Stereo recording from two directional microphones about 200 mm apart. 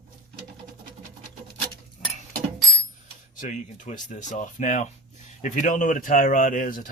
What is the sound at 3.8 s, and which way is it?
Speech, 40° left (ahead or behind).